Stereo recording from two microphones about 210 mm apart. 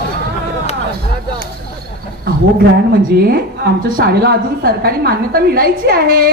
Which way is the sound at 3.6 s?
50° right (ahead or behind).